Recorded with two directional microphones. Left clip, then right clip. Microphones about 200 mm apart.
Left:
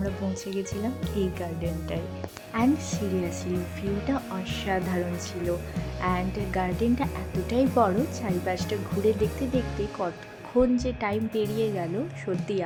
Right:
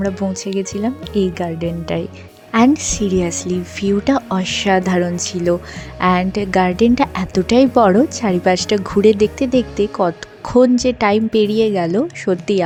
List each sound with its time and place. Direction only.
0.5 s a woman's voice: 40° right (ahead or behind)